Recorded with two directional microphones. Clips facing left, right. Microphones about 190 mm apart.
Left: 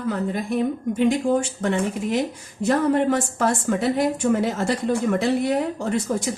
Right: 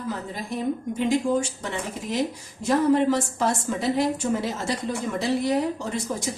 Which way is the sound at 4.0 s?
55° left (ahead or behind).